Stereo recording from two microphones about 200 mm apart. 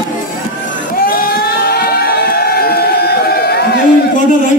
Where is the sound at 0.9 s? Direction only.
45° left (ahead or behind).